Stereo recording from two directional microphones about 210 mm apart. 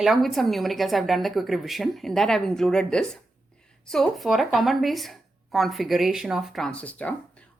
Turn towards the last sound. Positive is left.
turn(degrees=5)  # may be behind; listen again after turning